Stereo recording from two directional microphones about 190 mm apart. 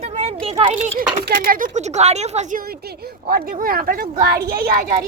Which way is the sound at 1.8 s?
35° right (ahead or behind).